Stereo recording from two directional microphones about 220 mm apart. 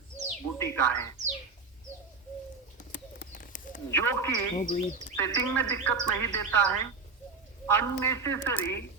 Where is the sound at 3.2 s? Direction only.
35° left (ahead or behind).